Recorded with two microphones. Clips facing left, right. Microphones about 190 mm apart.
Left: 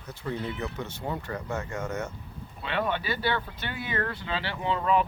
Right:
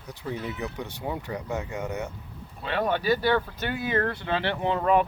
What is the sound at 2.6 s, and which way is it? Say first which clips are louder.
Speech: right 5 dB; 40° right (ahead or behind).